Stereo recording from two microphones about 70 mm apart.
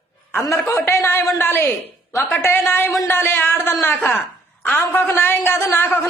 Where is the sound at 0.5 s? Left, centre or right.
Left.